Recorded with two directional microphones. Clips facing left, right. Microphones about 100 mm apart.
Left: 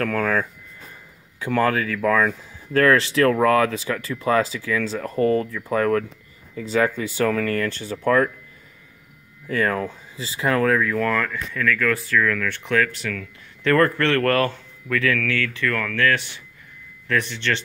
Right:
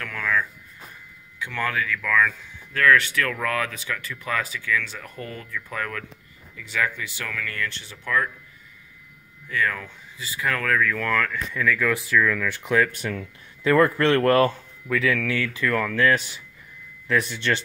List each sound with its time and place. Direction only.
0.0 s speech: 45° left (ahead or behind)
9.5 s speech: 40° left (ahead or behind); by 11.3 s 10° left (ahead or behind)
11.5 s speech: 5° right (ahead or behind); by 13.3 s 20° right (ahead or behind)
13.7 s speech: 10° right (ahead or behind)